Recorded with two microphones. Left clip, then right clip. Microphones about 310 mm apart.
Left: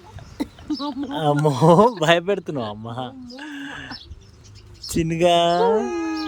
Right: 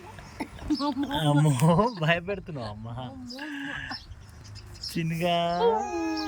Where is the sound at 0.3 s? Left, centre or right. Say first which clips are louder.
Left 3 dB; left.